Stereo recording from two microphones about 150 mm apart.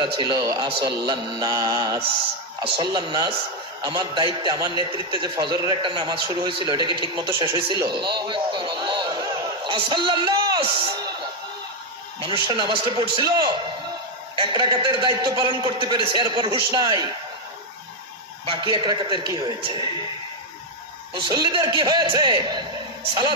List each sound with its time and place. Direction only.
0.0 s mantra: 30° right (ahead or behind)
2.6 s a man's voice: 35° right (ahead or behind)
12.4 s a man's voice: 30° right (ahead or behind)
18.4 s a man's voice: 35° right (ahead or behind)
21.1 s a man's voice: 30° right (ahead or behind)